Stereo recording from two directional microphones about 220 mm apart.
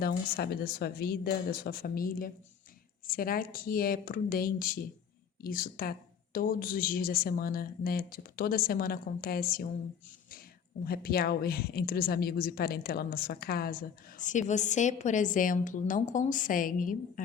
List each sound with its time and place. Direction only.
0.0 s a woman's voice: 45° left (ahead or behind)
10.8 s a woman's voice: 45° left (ahead or behind)